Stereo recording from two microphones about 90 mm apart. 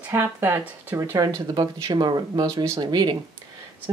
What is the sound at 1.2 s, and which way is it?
Speech, 40° right (ahead or behind).